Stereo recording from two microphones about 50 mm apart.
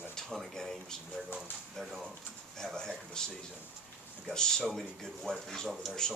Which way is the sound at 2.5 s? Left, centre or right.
Centre.